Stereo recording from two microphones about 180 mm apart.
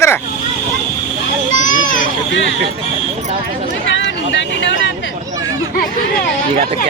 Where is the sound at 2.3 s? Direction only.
90° left.